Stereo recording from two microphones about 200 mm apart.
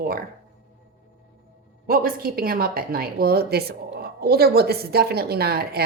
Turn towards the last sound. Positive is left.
turn(degrees=-50)  # may be behind; listen again after turning